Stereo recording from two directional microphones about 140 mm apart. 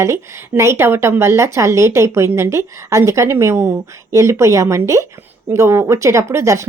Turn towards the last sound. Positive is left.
turn(degrees=-20)  # may be behind; listen again after turning